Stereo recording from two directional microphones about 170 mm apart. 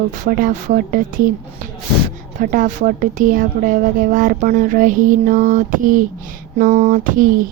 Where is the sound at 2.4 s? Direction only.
50° right (ahead or behind).